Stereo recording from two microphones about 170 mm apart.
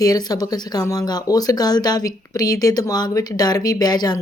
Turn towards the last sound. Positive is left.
turn(degrees=25)  # may be behind; listen again after turning